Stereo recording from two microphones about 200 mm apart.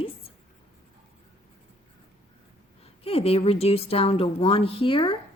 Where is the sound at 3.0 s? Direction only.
30° left (ahead or behind).